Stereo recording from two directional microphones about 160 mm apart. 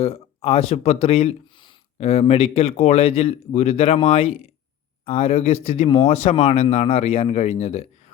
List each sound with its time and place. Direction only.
0.0 s speech: 40° left (ahead or behind)